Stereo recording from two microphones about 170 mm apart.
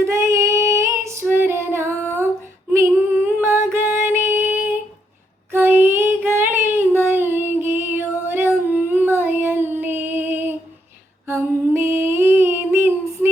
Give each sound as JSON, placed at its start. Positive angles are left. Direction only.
{"t": 0.0, "sound": "female singing", "side_deg": -15}
{"t": 3.4, "sound": "music", "side_deg": -15}
{"t": 5.5, "sound": "child singing", "side_deg": -10}
{"t": 11.3, "sound": "female singing", "side_deg": -15}